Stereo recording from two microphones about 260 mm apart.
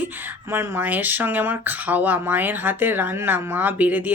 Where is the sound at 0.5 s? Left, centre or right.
Centre.